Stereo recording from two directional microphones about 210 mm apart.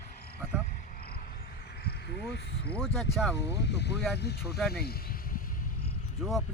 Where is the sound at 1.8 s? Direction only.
50° left (ahead or behind).